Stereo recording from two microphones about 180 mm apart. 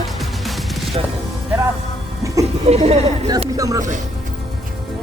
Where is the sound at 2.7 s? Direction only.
35° right (ahead or behind).